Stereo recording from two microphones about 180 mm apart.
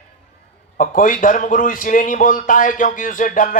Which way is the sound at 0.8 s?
50° left (ahead or behind).